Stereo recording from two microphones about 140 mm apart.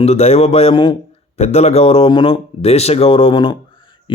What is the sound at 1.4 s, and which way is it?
A man's voice, 50° left (ahead or behind).